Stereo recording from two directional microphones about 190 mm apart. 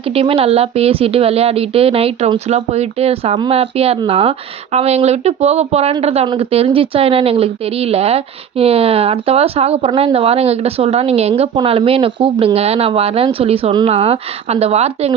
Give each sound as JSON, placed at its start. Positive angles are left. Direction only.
{"t": 0.1, "sound": "speech", "side_deg": -30}